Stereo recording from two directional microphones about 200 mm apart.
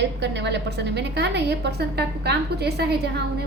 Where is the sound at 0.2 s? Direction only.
60° right (ahead or behind).